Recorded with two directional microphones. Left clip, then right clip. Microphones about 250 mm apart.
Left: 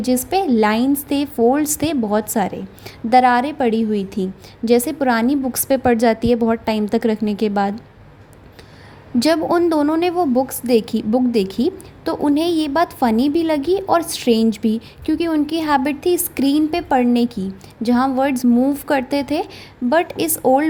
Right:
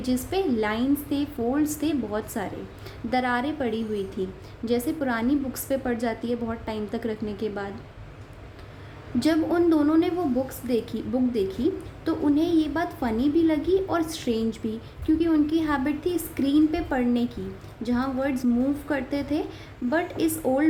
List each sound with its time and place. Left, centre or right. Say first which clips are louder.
0.0 s a woman's voice: left 8 dB; left
9.1 s a woman's voice: left 7 dB; left